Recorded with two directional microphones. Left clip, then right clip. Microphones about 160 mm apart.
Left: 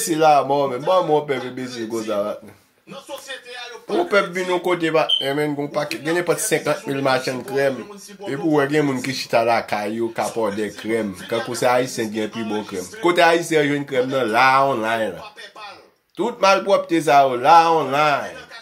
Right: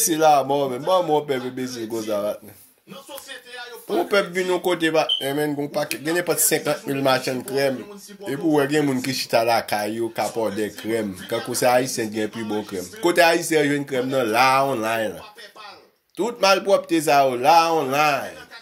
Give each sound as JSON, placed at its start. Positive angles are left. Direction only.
{"t": 0.0, "sound": "speech", "side_deg": -40}
{"t": 4.1, "sound": "speech", "side_deg": -40}
{"t": 16.2, "sound": "speech", "side_deg": -40}